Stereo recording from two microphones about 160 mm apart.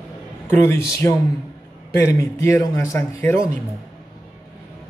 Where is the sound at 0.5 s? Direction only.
15° left (ahead or behind).